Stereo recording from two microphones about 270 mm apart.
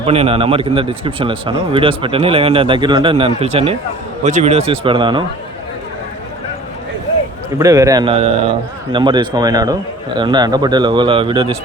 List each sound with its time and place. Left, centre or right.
0.0 s a man's voice: right
7.6 s a man's voice: centre